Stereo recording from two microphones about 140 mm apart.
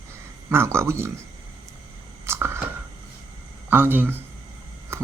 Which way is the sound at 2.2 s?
20° right (ahead or behind).